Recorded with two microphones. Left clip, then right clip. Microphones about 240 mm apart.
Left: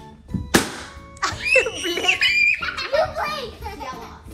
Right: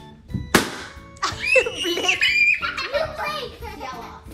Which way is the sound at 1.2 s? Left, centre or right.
Centre.